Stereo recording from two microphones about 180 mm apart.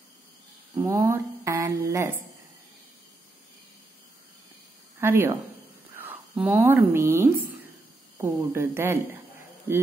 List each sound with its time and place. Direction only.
0.7 s speech: 15° right (ahead or behind)
5.0 s speech: 15° right (ahead or behind)